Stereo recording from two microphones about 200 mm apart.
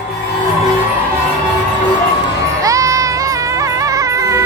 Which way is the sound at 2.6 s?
15° right (ahead or behind).